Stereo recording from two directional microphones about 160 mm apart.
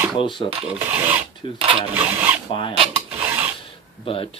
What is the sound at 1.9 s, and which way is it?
Speech, 10° right (ahead or behind).